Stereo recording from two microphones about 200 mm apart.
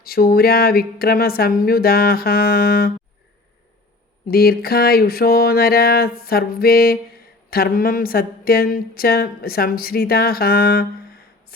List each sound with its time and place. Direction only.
0.0 s speech: 50° left (ahead or behind)
4.3 s speech: 50° left (ahead or behind)